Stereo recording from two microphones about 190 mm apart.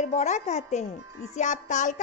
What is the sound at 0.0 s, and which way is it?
A woman's voice, 35° left (ahead or behind).